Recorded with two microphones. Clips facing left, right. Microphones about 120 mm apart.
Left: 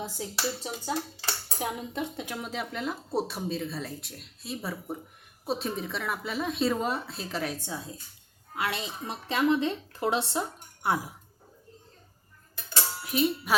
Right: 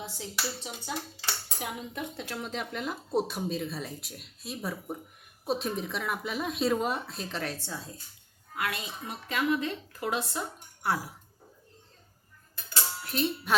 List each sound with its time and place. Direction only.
0.0 s speech: 40° left (ahead or behind)
2.1 s speech: 10° left (ahead or behind)
8.5 s a woman's voice: 25° left (ahead or behind)
13.0 s speech: 10° left (ahead or behind)